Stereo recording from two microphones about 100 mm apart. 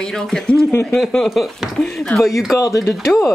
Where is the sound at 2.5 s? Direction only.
35° left (ahead or behind).